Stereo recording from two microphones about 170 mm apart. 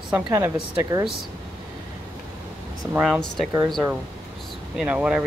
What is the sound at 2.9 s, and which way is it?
Speech, 5° right (ahead or behind).